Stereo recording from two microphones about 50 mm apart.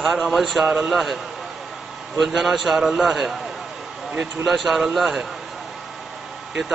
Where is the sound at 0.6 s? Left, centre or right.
Centre.